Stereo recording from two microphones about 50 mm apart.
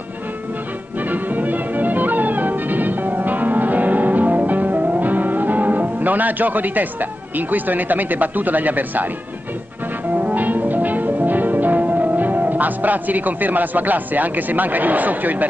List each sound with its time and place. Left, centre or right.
1.0 s music: right
10.1 s music: right